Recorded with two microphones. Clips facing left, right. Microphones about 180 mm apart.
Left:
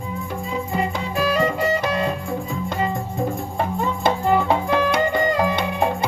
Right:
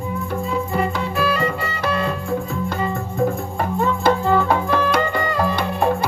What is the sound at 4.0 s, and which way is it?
Music, 20° left (ahead or behind).